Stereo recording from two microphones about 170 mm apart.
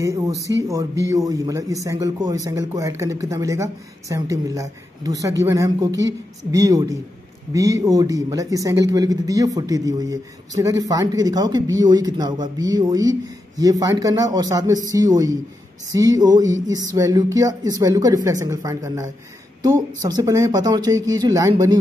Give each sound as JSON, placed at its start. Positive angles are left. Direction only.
{"t": 0.7, "sound": "speech", "side_deg": -20}